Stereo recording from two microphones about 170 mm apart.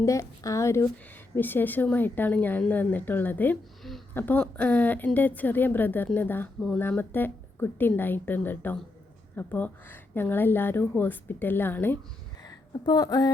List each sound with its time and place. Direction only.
0.0 s speech: 20° left (ahead or behind)
12.4 s speech: 25° left (ahead or behind)